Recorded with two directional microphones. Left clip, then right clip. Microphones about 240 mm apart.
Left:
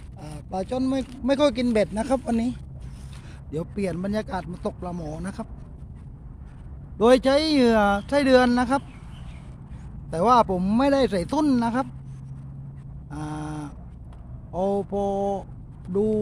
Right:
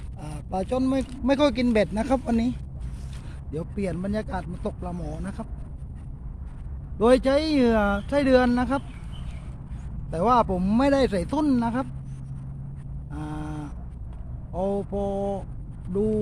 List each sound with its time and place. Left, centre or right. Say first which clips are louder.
0.2 s speech: right 1 dB; centre
3.5 s speech: left 2 dB; left
7.0 s speech: left 2 dB; left
10.1 s speech: left 2 dB; left
13.1 s a sound: left 2 dB; left
14.5 s speech: left 2 dB; left